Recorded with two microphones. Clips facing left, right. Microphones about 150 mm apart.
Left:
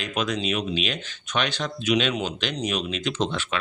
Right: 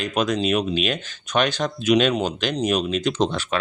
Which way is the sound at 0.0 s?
45° right (ahead or behind).